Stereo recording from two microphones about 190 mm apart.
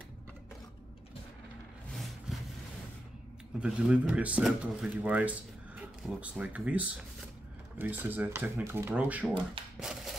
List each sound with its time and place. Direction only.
2.0 s vehicle: centre (ahead or behind)
3.6 s speech: 5° right (ahead or behind)
9.8 s a sound: 5° right (ahead or behind)